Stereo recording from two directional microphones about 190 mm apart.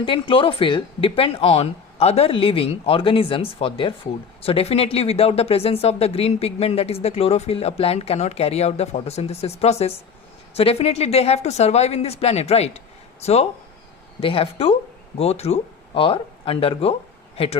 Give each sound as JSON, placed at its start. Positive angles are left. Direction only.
{"t": 0.0, "sound": "speech", "side_deg": 25}